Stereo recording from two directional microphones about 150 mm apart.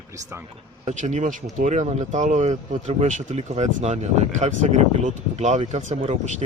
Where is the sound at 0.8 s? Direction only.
55° right (ahead or behind).